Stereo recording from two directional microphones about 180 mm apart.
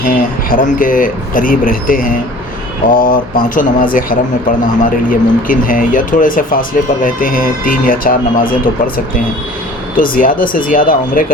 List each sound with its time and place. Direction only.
0.0 s speech: 50° left (ahead or behind)
10.0 s speech: 50° left (ahead or behind)